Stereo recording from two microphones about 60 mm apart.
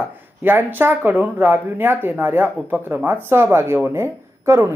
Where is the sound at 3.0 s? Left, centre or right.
Right.